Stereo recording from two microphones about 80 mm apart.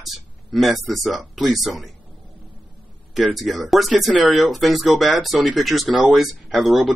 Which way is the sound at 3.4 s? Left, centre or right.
Centre.